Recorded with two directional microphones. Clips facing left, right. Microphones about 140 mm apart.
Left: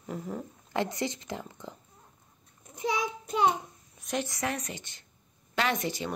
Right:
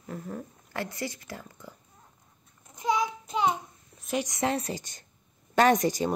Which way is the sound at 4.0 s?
5° right (ahead or behind).